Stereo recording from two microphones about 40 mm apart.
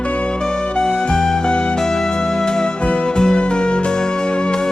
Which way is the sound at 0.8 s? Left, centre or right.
Centre.